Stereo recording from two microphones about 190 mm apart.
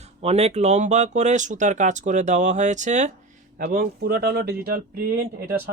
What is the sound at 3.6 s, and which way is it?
Speech, 55° right (ahead or behind).